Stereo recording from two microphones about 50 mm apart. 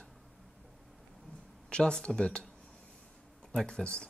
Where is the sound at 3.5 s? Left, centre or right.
Centre.